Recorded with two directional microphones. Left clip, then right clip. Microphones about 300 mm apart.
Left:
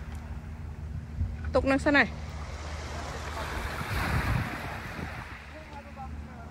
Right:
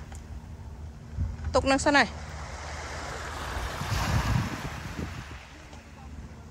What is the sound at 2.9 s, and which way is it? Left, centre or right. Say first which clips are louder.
Vehicle: even; right.